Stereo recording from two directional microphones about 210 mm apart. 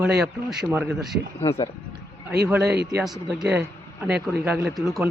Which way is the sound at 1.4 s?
30° left (ahead or behind).